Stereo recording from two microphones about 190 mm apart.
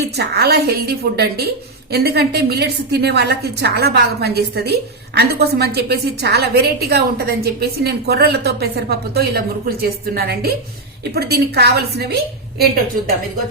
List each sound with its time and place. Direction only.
0.2 s a woman's voice: 60° right (ahead or behind)